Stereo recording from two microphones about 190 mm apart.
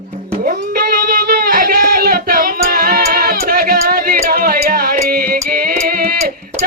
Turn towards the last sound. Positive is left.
turn(degrees=-50)  # may be behind; listen again after turning